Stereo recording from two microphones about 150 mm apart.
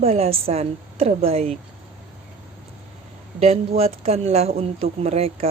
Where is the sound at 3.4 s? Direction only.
45° right (ahead or behind).